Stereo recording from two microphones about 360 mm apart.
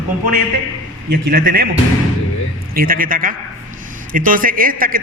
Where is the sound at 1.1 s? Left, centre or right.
Right.